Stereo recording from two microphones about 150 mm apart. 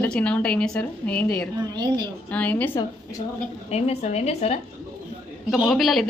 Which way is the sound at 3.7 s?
45° left (ahead or behind).